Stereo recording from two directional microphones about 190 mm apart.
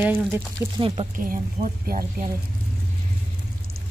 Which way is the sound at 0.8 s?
30° right (ahead or behind).